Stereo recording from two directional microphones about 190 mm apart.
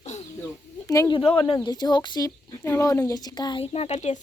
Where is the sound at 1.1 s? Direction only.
25° left (ahead or behind).